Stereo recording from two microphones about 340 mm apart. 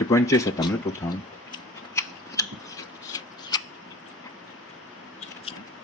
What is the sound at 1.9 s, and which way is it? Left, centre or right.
Scissors, centre.